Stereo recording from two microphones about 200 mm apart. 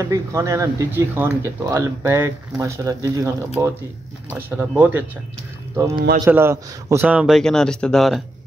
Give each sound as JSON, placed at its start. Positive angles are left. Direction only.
{"t": 0.0, "sound": "a man's voice", "side_deg": -15}